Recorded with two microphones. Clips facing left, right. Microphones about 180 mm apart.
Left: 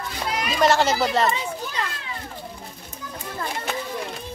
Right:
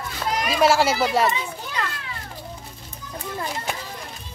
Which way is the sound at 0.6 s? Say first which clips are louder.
Even; 10° right (ahead or behind).